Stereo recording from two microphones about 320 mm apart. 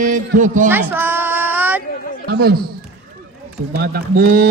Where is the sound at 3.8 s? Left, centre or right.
Right.